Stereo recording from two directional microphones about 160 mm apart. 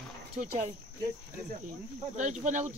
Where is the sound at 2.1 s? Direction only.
50° right (ahead or behind).